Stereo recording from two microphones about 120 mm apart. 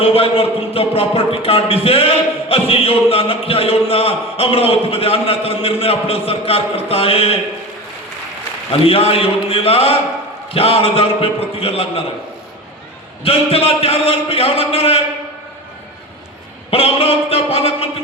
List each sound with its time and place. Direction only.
0.0 s speech: 50° left (ahead or behind)
8.8 s speech: 55° left (ahead or behind)
13.2 s speech: 55° left (ahead or behind)
16.7 s speech: 55° left (ahead or behind)